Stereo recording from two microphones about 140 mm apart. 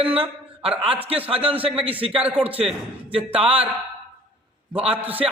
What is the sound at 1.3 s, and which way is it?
Speech, 40° right (ahead or behind).